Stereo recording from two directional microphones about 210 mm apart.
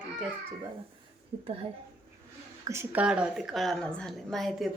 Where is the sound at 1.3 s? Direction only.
30° right (ahead or behind).